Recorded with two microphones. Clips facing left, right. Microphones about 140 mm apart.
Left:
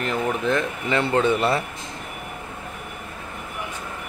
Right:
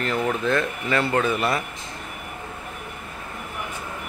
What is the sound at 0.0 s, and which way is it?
Speech, 20° left (ahead or behind).